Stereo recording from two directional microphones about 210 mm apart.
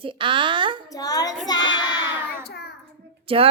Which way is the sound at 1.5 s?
20° left (ahead or behind).